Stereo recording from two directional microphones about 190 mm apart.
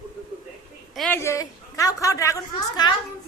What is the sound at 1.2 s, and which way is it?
A woman's voice, 15° left (ahead or behind).